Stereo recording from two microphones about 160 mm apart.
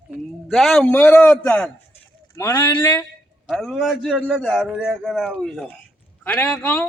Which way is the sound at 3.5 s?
Centre (ahead or behind).